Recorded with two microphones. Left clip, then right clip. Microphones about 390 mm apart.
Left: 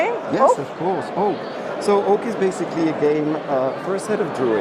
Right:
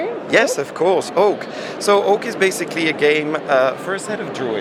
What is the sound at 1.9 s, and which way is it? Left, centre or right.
Speech, right.